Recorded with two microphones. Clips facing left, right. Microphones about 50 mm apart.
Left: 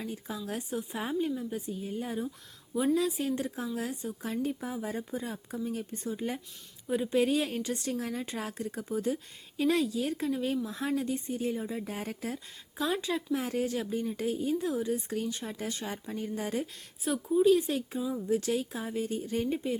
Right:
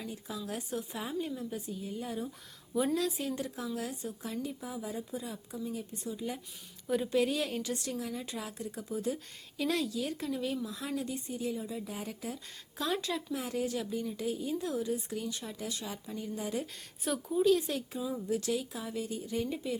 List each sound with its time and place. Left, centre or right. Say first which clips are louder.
0.1 s speech: left 2 dB; left
2.7 s a woman's voice: left 3 dB; centre
3.0 s speech: left 3 dB; left
6.8 s a woman's voice: left 1 dB; centre
7.1 s speech: left 5 dB; left
12.7 s speech: left 3 dB; centre
13.3 s speech: left 4 dB; left
17.1 s a woman's voice: left 2 dB; centre
17.4 s speech: left 3 dB; centre
18.3 s speech: left 4 dB; left